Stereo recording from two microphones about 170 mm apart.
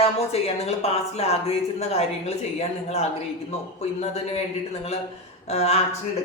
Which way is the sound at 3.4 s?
40° left (ahead or behind).